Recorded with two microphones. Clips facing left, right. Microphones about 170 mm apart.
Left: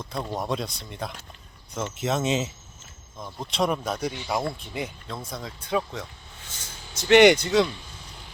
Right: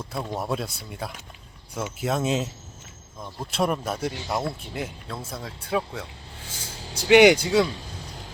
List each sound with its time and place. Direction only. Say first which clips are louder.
0.0 s speech: even; 5° right (ahead or behind)
6.7 s vehicle: right 3 dB; 35° right (ahead or behind)
7.1 s speech: right 1 dB; 10° right (ahead or behind)